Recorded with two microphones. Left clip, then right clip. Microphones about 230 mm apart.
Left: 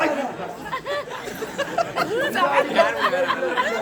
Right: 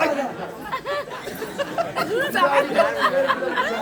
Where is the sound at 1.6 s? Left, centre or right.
Centre.